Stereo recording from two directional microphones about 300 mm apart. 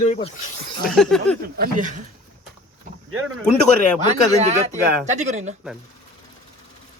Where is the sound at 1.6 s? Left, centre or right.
Right.